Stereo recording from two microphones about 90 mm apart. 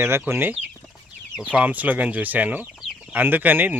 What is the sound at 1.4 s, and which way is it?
Speech, 15° right (ahead or behind).